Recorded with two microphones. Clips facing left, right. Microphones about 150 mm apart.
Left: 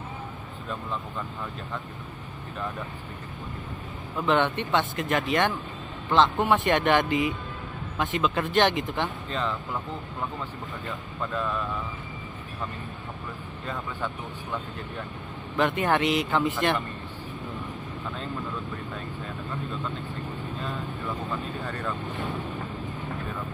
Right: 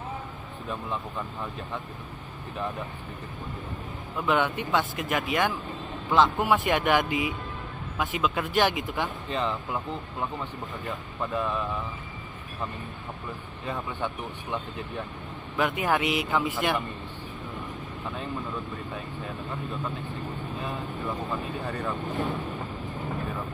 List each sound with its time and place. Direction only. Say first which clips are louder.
4.2 s speech: left 2 dB; 5° right (ahead or behind)
9.3 s speech: right 4 dB; 15° right (ahead or behind)
10.9 s speech: right 1 dB; 15° right (ahead or behind)
13.7 s speech: right 1 dB; 20° right (ahead or behind)
15.5 s speech: left 2 dB; 5° right (ahead or behind)
21.3 s speech: right 1 dB; 20° right (ahead or behind)